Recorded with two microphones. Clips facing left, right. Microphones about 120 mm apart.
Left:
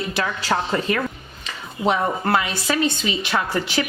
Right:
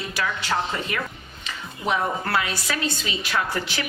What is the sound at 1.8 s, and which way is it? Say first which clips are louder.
A woman's voice: left 4 dB; 25° left (ahead or behind).